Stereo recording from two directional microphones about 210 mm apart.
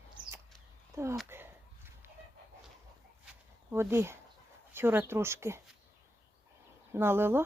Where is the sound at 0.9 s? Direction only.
15° right (ahead or behind).